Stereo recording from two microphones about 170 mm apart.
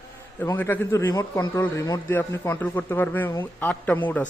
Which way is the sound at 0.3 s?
10° left (ahead or behind).